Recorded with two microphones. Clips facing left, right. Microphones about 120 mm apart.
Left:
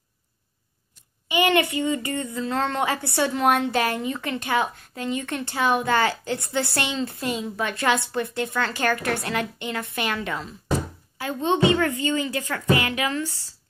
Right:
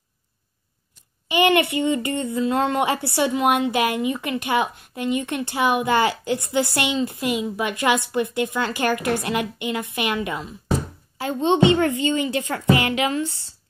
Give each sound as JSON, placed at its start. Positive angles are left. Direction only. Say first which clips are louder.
{"t": 1.4, "sound": "a woman's voice", "louder": "right 3 dB", "side_deg": -25}
{"t": 11.1, "sound": "a woman's voice", "louder": "right 4 dB", "side_deg": -25}